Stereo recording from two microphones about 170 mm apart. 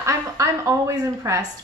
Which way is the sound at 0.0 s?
15° right (ahead or behind).